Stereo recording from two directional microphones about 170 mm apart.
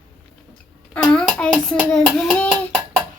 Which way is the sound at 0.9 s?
5° left (ahead or behind).